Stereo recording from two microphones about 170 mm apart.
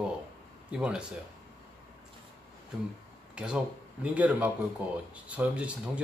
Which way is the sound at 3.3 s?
5° right (ahead or behind).